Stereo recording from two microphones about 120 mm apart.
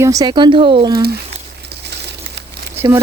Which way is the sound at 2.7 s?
20° right (ahead or behind).